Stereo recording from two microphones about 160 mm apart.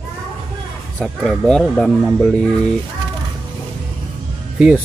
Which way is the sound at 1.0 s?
5° left (ahead or behind).